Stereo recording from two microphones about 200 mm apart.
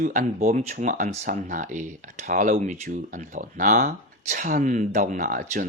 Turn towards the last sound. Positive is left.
turn(degrees=-45)  # may be behind; listen again after turning